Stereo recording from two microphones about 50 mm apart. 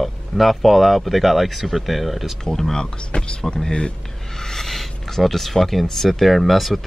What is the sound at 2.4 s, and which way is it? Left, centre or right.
Speech, centre.